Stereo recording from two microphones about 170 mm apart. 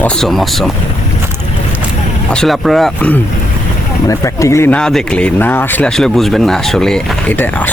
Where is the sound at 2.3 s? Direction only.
Centre (ahead or behind).